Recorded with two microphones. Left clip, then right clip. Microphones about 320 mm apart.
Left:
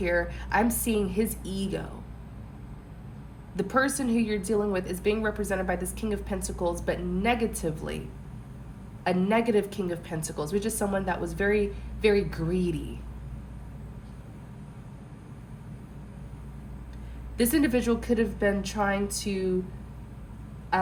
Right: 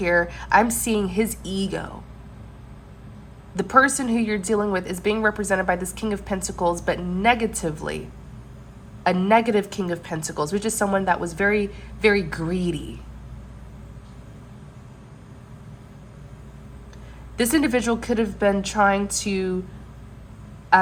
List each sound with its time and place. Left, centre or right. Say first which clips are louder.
0.0 s a woman's voice: right 7 dB; centre
3.5 s a woman's voice: right 9 dB; centre
9.0 s a woman's voice: right 7 dB; centre
17.3 s a woman's voice: right 4 dB; centre